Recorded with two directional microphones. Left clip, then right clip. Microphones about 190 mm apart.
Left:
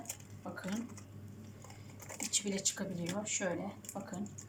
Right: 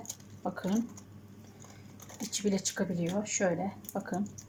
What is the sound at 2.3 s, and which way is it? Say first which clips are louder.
Speech: right 4 dB; 40° right (ahead or behind).